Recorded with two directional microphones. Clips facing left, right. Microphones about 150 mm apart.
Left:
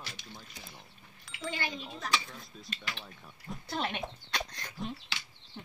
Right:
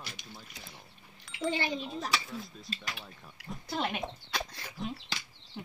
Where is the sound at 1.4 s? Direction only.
35° right (ahead or behind).